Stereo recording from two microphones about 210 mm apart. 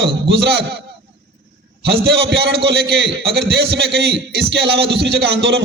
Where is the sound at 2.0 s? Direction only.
50° right (ahead or behind).